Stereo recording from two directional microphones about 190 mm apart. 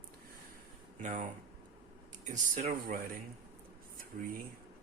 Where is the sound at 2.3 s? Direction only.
40° right (ahead or behind).